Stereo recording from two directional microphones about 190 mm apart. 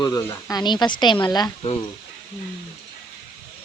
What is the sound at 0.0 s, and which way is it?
Speech, 15° left (ahead or behind).